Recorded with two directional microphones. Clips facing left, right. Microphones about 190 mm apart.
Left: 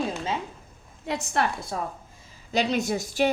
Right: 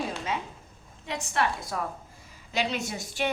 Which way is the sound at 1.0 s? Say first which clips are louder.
Left 2 dB; 40° left (ahead or behind).